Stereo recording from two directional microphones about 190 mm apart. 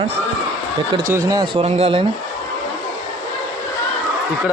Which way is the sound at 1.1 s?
15° right (ahead or behind).